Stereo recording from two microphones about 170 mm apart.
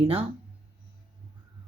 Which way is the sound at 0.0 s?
35° right (ahead or behind).